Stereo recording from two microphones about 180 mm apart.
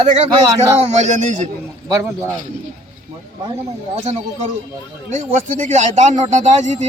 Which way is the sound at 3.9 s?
40° right (ahead or behind).